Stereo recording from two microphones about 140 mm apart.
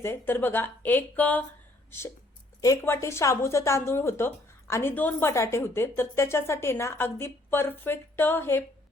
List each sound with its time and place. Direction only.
0.0 s a woman's voice: 15° left (ahead or behind)
2.6 s a woman's voice: 20° left (ahead or behind)